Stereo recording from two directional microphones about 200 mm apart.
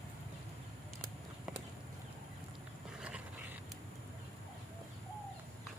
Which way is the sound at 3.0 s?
5° right (ahead or behind).